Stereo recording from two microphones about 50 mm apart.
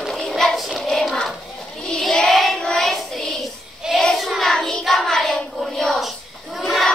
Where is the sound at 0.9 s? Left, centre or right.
Centre.